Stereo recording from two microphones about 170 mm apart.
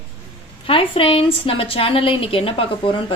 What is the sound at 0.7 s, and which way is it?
A woman's voice, 30° left (ahead or behind).